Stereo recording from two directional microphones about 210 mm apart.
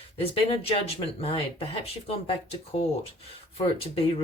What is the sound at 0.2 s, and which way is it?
Speech, 30° left (ahead or behind).